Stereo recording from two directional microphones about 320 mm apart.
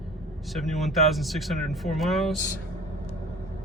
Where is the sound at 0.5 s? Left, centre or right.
Centre.